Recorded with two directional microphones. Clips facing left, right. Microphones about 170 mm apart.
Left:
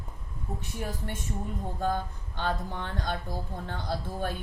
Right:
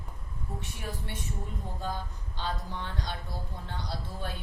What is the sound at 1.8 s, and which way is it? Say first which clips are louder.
Speech: left 8 dB; 50° left (ahead or behind).